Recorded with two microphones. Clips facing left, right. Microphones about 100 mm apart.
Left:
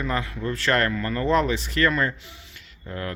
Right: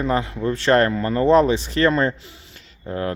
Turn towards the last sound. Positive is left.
turn(degrees=-25)  # may be behind; listen again after turning